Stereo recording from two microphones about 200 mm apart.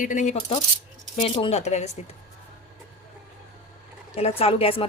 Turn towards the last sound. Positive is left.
turn(degrees=30)  # may be behind; listen again after turning